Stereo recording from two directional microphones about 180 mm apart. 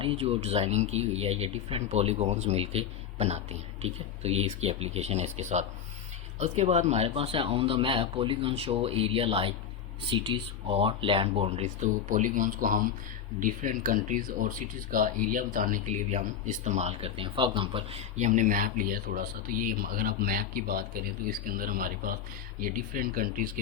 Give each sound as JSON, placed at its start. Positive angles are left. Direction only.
{"t": 0.0, "sound": "speech", "side_deg": -30}